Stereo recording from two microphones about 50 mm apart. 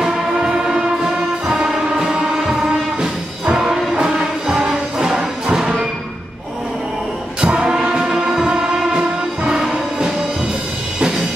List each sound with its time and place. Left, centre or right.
0.0 s music: centre
7.4 s music: centre